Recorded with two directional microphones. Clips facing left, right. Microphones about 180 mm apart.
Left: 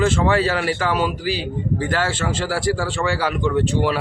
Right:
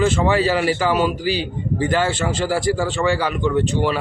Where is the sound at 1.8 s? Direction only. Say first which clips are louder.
Right 5 dB; 20° right (ahead or behind).